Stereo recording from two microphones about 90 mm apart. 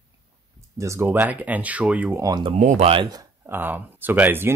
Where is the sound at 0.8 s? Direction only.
35° right (ahead or behind).